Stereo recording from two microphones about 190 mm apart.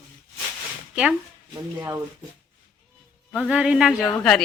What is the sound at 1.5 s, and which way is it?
Speech, 15° right (ahead or behind).